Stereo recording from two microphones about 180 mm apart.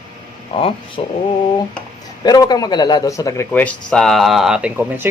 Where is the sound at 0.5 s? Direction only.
30° left (ahead or behind).